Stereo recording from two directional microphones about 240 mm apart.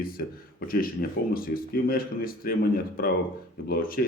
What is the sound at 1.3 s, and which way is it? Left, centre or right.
A man's voice, left.